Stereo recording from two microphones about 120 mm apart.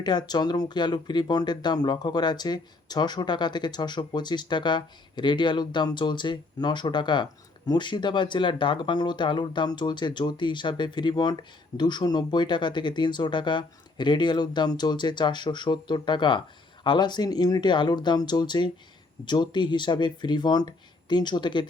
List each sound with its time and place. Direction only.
0.0 s speech: 35° left (ahead or behind)